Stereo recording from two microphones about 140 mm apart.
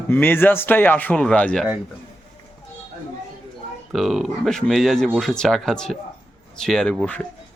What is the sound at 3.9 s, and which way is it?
Speech, centre (ahead or behind).